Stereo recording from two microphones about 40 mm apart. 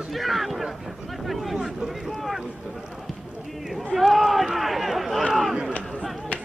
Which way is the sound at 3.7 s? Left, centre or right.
Centre.